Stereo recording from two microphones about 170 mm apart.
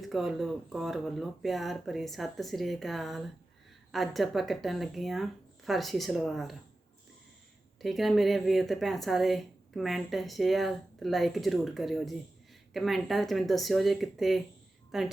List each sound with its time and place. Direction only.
0.0 s speech: centre (ahead or behind)
7.8 s speech: centre (ahead or behind)